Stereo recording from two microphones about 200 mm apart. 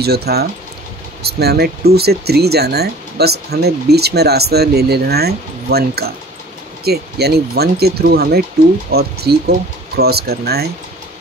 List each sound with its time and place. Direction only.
0.0 s speech: 55° right (ahead or behind)